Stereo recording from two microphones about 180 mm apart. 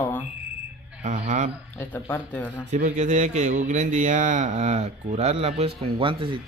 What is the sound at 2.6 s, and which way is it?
Speech, 45° right (ahead or behind).